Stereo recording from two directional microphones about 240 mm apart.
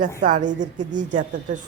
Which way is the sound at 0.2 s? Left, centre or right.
Right.